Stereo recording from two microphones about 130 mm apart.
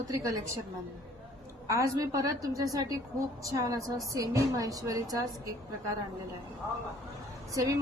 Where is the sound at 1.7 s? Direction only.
25° right (ahead or behind).